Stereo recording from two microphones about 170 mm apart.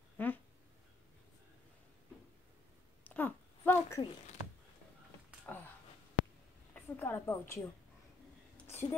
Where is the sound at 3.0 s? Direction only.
10° left (ahead or behind).